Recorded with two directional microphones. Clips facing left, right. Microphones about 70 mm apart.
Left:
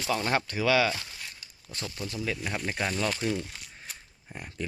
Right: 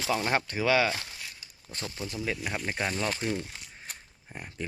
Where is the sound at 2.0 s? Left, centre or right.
Centre.